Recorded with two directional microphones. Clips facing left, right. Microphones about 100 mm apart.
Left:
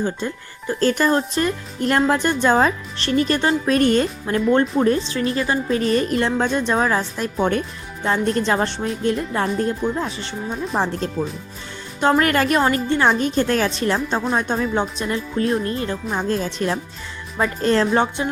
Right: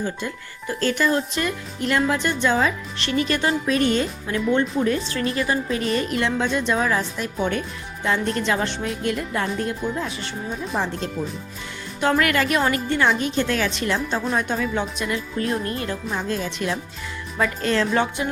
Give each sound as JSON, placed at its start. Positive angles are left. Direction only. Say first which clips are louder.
{"t": 0.7, "sound": "speech", "louder": "left 3 dB", "side_deg": 40}
{"t": 5.0, "sound": "speech", "louder": "left 2 dB", "side_deg": 30}
{"t": 11.9, "sound": "speech", "louder": "left 3 dB", "side_deg": 30}